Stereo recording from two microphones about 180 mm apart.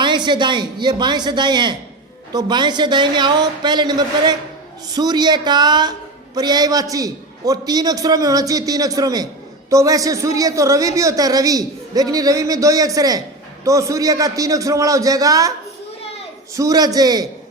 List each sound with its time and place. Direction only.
0.0 s a woman's voice: 25° right (ahead or behind)
16.6 s a woman's voice: 20° right (ahead or behind)